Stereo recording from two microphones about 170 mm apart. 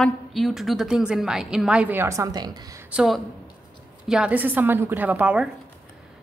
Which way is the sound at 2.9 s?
5° right (ahead or behind).